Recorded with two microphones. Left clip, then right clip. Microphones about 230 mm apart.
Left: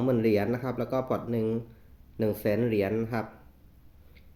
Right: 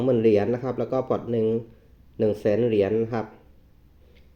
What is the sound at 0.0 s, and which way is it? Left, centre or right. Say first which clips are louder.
Speech: right 6 dB; centre.